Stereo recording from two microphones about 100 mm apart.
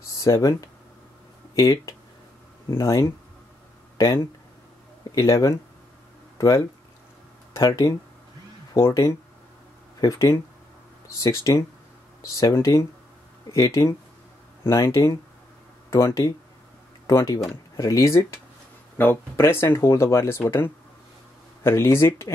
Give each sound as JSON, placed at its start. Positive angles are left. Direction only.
{"t": 0.2, "sound": "speech", "side_deg": 35}
{"t": 18.9, "sound": "speech", "side_deg": 20}